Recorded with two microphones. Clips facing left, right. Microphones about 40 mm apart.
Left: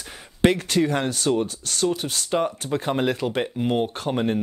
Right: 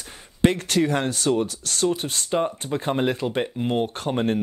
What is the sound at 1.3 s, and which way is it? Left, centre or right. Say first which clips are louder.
Speech: right 1 dB; centre.